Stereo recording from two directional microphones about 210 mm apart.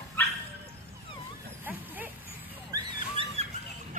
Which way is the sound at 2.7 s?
25° right (ahead or behind).